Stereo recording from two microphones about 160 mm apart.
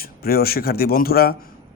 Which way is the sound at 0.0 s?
70° left (ahead or behind).